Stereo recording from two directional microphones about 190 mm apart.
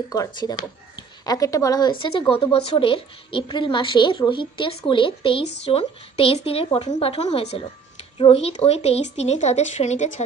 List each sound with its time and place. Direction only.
0.1 s speech: 20° left (ahead or behind); by 10.2 s 40° left (ahead or behind)